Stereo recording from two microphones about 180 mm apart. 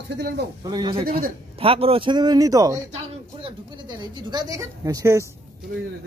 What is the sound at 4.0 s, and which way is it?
Speech, 25° right (ahead or behind).